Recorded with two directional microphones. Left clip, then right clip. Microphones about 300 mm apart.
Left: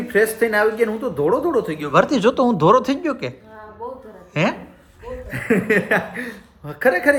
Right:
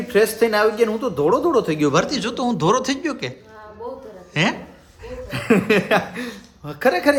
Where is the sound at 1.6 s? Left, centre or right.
Right.